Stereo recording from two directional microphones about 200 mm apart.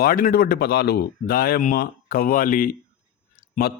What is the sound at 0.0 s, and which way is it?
Speech, 45° left (ahead or behind).